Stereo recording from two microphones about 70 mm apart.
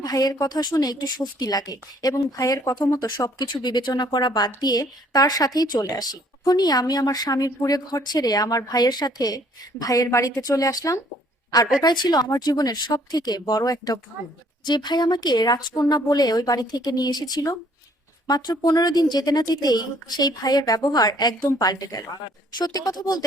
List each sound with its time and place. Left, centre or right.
0.0 s a woman's voice: left
3.0 s a woman's voice: left
11.8 s a woman's voice: left
14.6 s a woman's voice: left